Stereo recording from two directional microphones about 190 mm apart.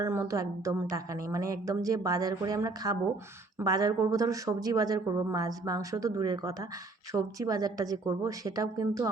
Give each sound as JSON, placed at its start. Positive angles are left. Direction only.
{"t": 0.0, "sound": "a woman's voice", "side_deg": -15}